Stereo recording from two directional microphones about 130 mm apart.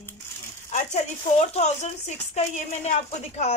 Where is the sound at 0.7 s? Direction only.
60° left (ahead or behind).